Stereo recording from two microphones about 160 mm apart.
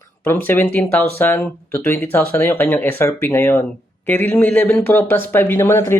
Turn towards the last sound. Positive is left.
turn(degrees=15)  # may be behind; listen again after turning